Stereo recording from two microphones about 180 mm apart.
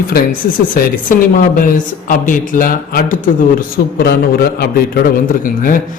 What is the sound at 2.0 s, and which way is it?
A man's voice, 45° left (ahead or behind).